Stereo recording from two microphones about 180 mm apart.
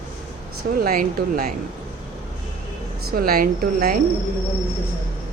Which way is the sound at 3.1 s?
55° right (ahead or behind).